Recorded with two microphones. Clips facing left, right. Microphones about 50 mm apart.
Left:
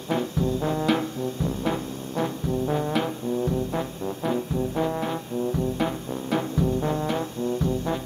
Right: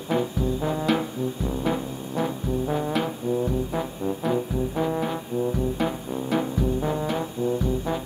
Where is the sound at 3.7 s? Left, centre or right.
Centre.